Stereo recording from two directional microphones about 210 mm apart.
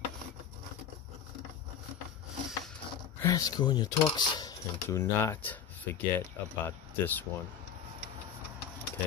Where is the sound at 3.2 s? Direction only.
15° left (ahead or behind).